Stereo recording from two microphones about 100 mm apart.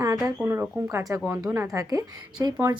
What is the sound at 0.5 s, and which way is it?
A woman's voice, 25° right (ahead or behind).